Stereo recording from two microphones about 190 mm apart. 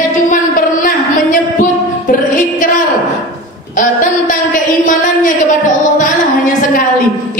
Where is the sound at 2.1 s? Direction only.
45° left (ahead or behind).